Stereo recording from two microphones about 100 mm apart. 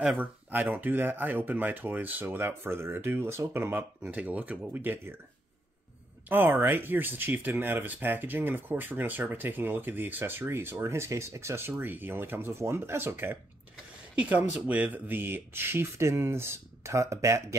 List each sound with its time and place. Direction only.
0.0 s speech: 15° right (ahead or behind)
6.2 s speech: 20° right (ahead or behind)